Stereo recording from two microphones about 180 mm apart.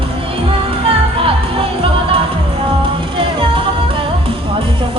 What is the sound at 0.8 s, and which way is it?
Music, 30° right (ahead or behind).